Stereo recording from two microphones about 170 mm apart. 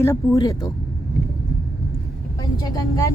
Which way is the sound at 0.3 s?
20° left (ahead or behind).